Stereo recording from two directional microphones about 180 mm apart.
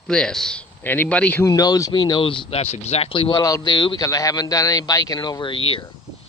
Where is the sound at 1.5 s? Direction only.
20° left (ahead or behind).